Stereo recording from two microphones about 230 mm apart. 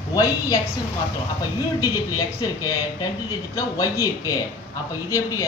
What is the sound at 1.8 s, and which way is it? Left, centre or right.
Speech, centre.